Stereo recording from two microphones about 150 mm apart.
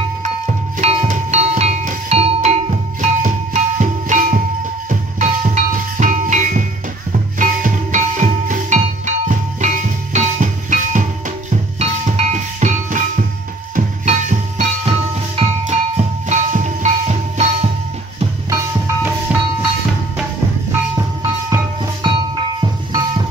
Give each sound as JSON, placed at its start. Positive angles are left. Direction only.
{"t": 0.2, "sound": "music", "side_deg": -50}
{"t": 19.3, "sound": "music", "side_deg": -5}
{"t": 20.9, "sound": "music", "side_deg": -20}
{"t": 22.0, "sound": "music", "side_deg": -30}